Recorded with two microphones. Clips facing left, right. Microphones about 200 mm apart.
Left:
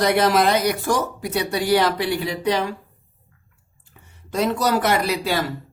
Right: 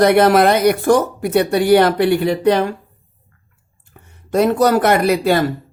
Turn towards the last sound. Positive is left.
turn(degrees=-55)  # may be behind; listen again after turning